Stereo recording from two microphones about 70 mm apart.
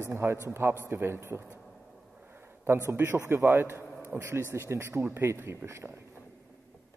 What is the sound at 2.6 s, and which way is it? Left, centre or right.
Speech, right.